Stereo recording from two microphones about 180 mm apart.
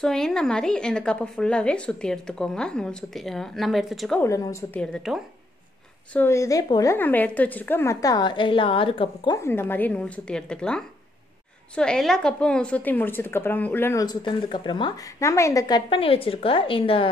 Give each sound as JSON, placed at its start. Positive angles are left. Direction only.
{"t": 0.0, "sound": "speech", "side_deg": 5}
{"t": 4.2, "sound": "a woman's voice", "side_deg": 15}
{"t": 4.7, "sound": "speech", "side_deg": 0}
{"t": 6.1, "sound": "a woman's voice", "side_deg": 15}